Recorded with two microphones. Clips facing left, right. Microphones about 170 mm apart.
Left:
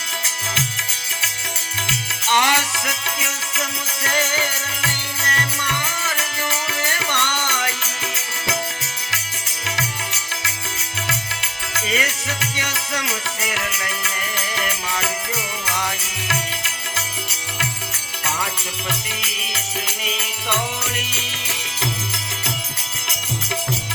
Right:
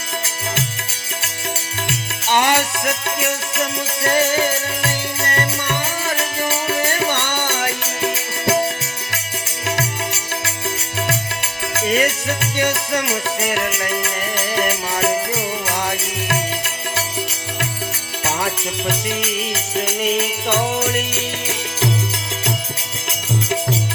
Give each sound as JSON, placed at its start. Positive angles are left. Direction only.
{"t": 1.9, "sound": "music", "side_deg": -55}
{"t": 11.9, "sound": "music", "side_deg": -55}
{"t": 15.6, "sound": "music", "side_deg": -55}
{"t": 18.4, "sound": "music", "side_deg": -55}